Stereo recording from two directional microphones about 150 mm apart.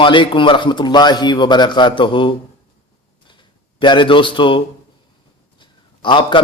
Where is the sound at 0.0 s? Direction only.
35° left (ahead or behind).